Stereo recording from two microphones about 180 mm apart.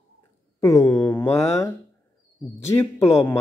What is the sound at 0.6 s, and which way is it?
Speech, 15° left (ahead or behind).